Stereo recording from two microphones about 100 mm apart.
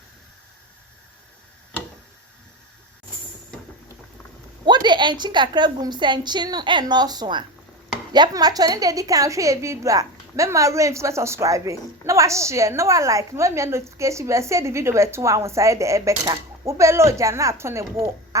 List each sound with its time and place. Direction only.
4.6 s a woman's voice: 50° right (ahead or behind); by 17.8 s 25° right (ahead or behind)